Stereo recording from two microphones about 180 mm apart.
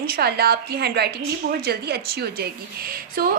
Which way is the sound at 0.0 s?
60° right (ahead or behind).